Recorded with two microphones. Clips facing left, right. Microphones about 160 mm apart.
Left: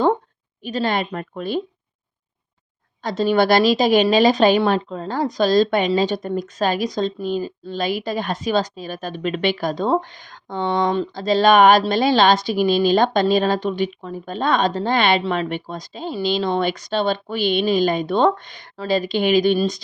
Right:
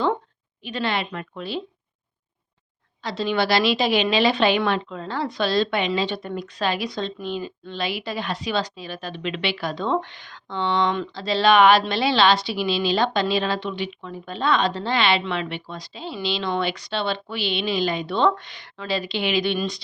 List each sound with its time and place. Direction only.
0.6 s a woman's voice: 40° left (ahead or behind)
3.0 s a woman's voice: 45° left (ahead or behind)